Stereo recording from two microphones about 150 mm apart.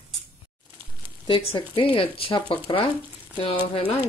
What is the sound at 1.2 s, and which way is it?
Speech, 35° left (ahead or behind).